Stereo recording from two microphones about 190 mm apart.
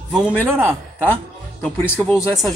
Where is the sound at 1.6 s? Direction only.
10° left (ahead or behind).